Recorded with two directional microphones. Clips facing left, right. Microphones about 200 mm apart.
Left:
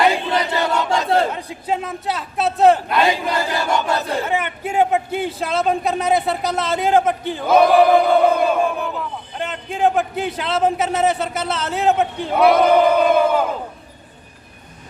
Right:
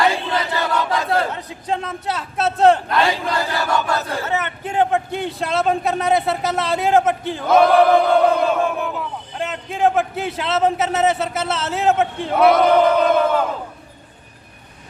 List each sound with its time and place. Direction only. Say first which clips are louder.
0.0 s battle cry: left 2 dB; 20° left (ahead or behind)
1.3 s a man's voice: left 1 dB; 10° left (ahead or behind)
3.0 s battle cry: left 1 dB; 15° left (ahead or behind); by 9.0 s centre (ahead or behind)
9.4 s a man's voice: even; centre (ahead or behind)